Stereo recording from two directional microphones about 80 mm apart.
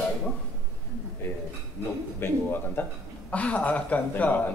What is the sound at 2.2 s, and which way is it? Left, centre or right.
A man's voice, left.